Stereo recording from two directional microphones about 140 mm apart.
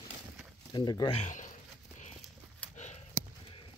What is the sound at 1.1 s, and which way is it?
Speech, 60° left (ahead or behind).